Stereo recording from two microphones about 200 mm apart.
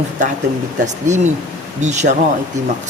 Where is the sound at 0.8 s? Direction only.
35° right (ahead or behind).